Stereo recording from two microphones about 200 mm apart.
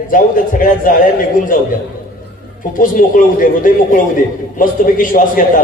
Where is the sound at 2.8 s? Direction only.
45° left (ahead or behind).